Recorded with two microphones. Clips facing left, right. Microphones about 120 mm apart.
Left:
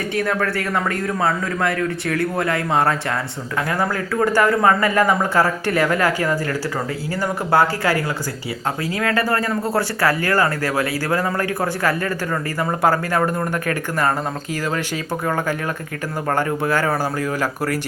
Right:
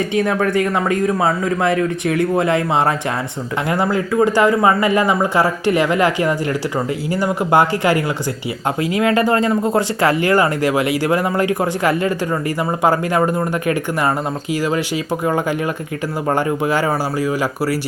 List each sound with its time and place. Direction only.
0.1 s a man's voice: 20° right (ahead or behind)
7.1 s speech: 15° right (ahead or behind)
16.3 s speech: 15° right (ahead or behind)